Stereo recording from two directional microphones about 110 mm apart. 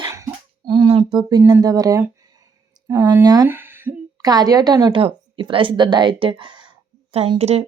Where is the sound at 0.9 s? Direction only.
55° right (ahead or behind).